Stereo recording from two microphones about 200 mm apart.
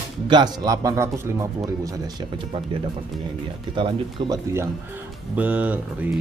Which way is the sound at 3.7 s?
25° right (ahead or behind).